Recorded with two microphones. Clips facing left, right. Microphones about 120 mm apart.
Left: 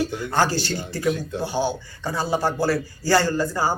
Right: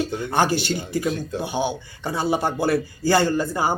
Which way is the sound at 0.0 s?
25° right (ahead or behind).